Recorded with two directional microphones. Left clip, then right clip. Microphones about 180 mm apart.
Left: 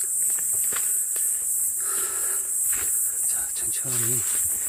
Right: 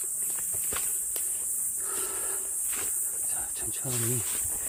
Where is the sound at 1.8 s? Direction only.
10° right (ahead or behind).